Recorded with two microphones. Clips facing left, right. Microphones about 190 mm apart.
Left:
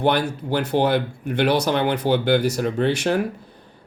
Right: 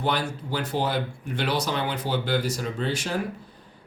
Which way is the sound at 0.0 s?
65° left (ahead or behind).